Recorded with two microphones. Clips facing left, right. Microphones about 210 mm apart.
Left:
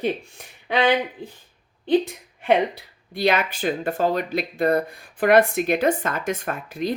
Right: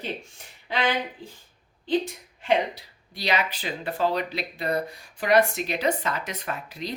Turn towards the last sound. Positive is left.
turn(degrees=50)  # may be behind; listen again after turning